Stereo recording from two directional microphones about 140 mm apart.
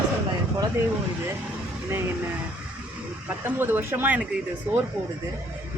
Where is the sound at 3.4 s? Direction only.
15° right (ahead or behind).